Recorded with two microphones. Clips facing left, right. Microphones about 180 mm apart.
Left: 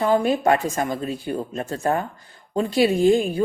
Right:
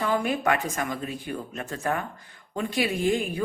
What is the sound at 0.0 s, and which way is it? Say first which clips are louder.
A man's voice: left 6 dB; 30° left (ahead or behind).